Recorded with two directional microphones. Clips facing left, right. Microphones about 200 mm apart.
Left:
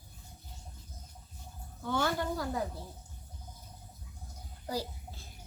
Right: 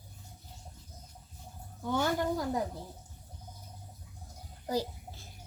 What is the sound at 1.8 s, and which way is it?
Speech, 15° right (ahead or behind).